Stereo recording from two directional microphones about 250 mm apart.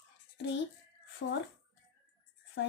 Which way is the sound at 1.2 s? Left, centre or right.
Left.